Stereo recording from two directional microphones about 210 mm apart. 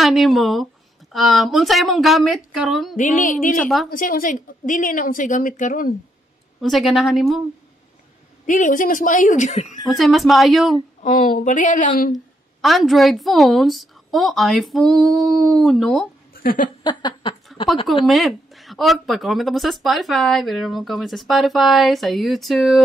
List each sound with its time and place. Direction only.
0.0 s speech: centre (ahead or behind)
3.0 s speech: 40° left (ahead or behind)
3.5 s speech: centre (ahead or behind)
3.9 s speech: 40° left (ahead or behind)
6.6 s speech: centre (ahead or behind)
8.5 s speech: 40° left (ahead or behind)
9.9 s speech: centre (ahead or behind)
11.0 s a woman's voice: 40° left (ahead or behind)
12.6 s speech: centre (ahead or behind)
16.8 s a sound: 20° left (ahead or behind)
18.0 s speech: centre (ahead or behind)